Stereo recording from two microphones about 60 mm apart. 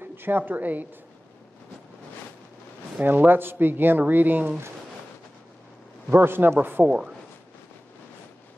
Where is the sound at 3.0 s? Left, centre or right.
Right.